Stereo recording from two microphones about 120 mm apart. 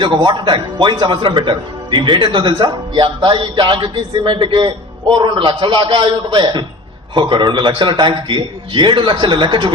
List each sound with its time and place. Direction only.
0.0 s speech: 40° right (ahead or behind)